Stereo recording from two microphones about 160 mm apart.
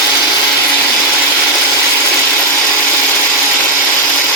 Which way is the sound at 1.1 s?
5° left (ahead or behind).